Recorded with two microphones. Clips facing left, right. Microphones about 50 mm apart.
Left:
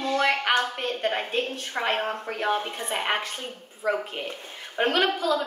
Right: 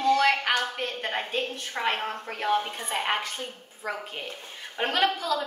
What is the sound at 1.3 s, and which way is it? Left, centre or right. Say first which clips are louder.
A woman's voice: left 2 dB; left.